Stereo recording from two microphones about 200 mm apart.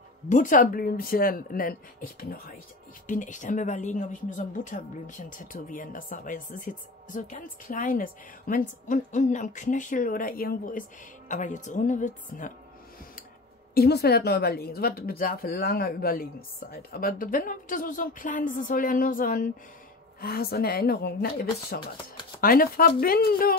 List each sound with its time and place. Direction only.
0.3 s speech: 40° left (ahead or behind)
13.7 s speech: 55° left (ahead or behind)